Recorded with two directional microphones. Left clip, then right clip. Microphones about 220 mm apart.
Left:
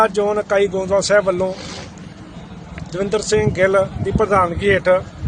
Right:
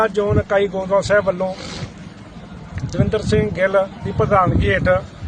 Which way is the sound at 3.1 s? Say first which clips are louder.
Left 2 dB; 25° left (ahead or behind).